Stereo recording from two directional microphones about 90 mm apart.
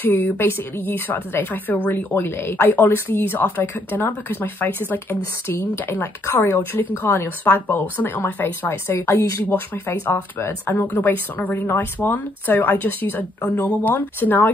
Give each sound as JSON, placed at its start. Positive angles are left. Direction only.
{"t": 0.0, "sound": "speech", "side_deg": 25}